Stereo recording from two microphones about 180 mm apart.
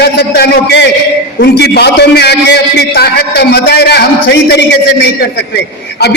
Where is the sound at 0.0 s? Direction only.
65° left (ahead or behind).